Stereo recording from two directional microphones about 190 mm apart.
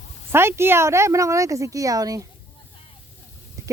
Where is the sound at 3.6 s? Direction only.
15° right (ahead or behind).